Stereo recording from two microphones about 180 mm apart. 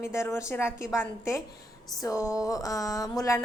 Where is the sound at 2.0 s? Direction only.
20° left (ahead or behind).